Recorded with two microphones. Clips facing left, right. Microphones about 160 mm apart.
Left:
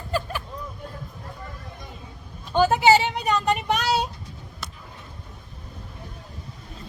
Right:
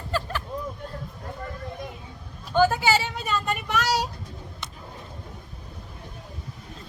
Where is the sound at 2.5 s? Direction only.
25° left (ahead or behind).